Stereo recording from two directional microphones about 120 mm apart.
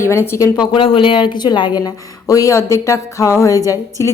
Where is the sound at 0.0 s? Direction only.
25° left (ahead or behind).